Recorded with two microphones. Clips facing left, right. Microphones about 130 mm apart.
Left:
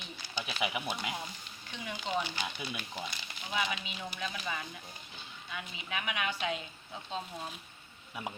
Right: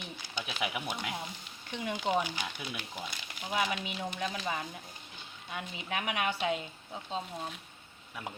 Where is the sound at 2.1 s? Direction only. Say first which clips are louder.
Right 3 dB; 15° right (ahead or behind).